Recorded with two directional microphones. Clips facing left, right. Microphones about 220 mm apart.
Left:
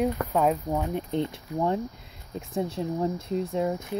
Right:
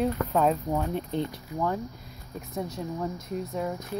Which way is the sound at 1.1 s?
25° left (ahead or behind).